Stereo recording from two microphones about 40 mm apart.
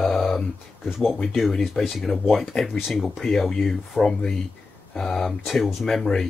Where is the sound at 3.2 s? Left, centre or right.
Centre.